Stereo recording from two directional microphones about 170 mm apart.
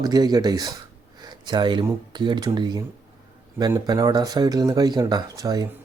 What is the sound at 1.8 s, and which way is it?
Speech, 25° right (ahead or behind).